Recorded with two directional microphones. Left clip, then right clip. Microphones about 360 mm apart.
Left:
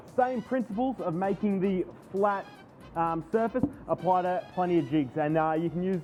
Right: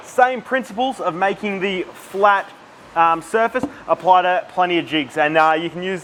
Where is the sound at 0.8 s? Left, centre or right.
Right.